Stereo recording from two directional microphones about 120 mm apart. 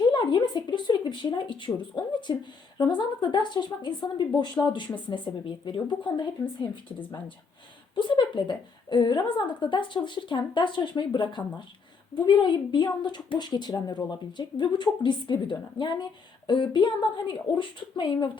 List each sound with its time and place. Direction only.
0.0 s a sound: 40° left (ahead or behind)
2.9 s speech: 40° left (ahead or behind)
7.9 s speech: 40° left (ahead or behind)